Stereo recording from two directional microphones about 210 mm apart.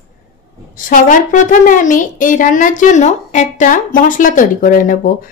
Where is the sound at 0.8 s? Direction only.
40° left (ahead or behind).